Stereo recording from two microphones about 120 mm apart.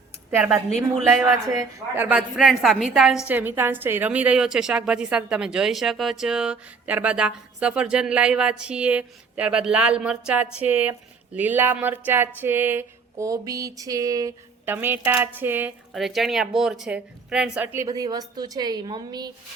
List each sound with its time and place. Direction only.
0.3 s speech: 15° right (ahead or behind)
2.0 s a woman's voice: 15° right (ahead or behind)
2.4 s speech: centre (ahead or behind)
3.3 s a woman's voice: 20° right (ahead or behind)
11.3 s a sound: 15° right (ahead or behind)
14.6 s a woman's voice: 20° right (ahead or behind)
15.9 s speech: centre (ahead or behind)
17.8 s a woman's voice: 35° right (ahead or behind)